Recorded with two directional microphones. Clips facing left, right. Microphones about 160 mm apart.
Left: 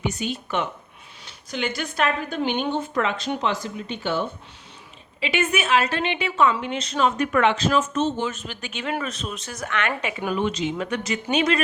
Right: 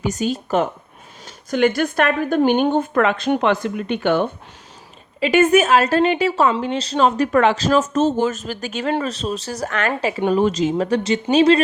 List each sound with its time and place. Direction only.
0.0 s a woman's voice: 40° right (ahead or behind); by 4.3 s 60° right (ahead or behind)
5.2 s a woman's voice: 45° right (ahead or behind)